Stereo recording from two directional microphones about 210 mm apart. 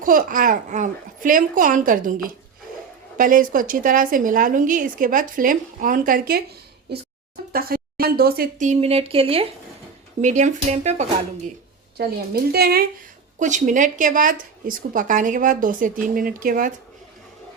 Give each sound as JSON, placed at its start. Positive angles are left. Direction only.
{"t": 0.0, "sound": "a woman's voice", "side_deg": -40}
{"t": 7.5, "sound": "a woman's voice", "side_deg": -45}
{"t": 11.9, "sound": "a woman's voice", "side_deg": -45}